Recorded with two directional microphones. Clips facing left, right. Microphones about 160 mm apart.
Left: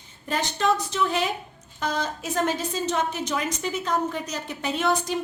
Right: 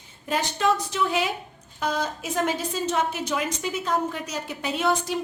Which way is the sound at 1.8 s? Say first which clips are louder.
Right 1 dB; 5° right (ahead or behind).